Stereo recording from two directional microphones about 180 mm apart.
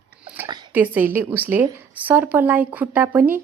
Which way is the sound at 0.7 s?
10° right (ahead or behind).